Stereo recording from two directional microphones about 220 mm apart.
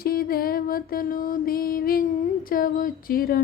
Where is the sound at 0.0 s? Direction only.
40° left (ahead or behind).